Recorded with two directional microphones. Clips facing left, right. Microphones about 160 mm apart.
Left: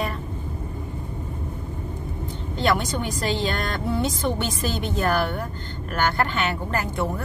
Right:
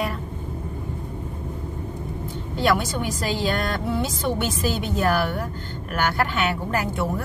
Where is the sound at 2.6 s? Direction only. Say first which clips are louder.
Right 1 dB; 5° right (ahead or behind).